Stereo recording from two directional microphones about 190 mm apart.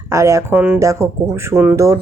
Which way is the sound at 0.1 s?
15° right (ahead or behind).